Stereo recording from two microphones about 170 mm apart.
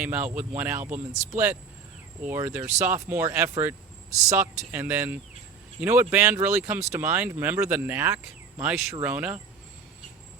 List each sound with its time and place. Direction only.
0.0 s speech: 10° right (ahead or behind)
0.9 s speech: 45° right (ahead or behind)
2.2 s speech: 10° right (ahead or behind)